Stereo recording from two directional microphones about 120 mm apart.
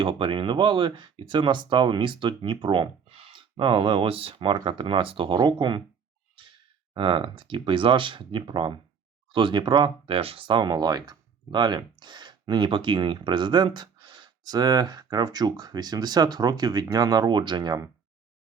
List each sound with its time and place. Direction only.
0.0 s speech: 45° right (ahead or behind)
6.9 s speech: 45° right (ahead or behind)